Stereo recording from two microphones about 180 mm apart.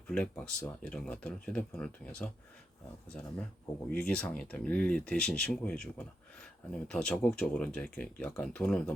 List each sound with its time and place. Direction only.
0.1 s speech: 5° left (ahead or behind)